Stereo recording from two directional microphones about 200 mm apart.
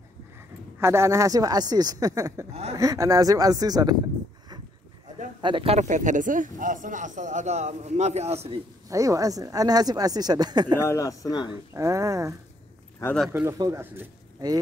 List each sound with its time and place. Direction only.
0.7 s speech: 15° right (ahead or behind)
5.4 s speech: 25° right (ahead or behind)
8.8 s speech: 15° right (ahead or behind)
10.8 s speech: 15° left (ahead or behind)
11.7 s speech: 15° right (ahead or behind)
13.0 s speech: 5° left (ahead or behind)
13.3 s speech: 15° right (ahead or behind)